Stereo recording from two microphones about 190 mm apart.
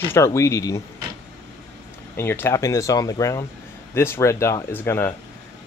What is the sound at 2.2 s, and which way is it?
Speech, 15° left (ahead or behind).